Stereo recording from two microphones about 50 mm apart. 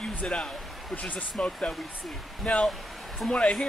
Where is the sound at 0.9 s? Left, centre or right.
Left.